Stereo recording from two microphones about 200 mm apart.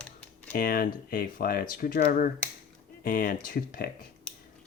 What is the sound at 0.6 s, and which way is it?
Speech, 50° left (ahead or behind).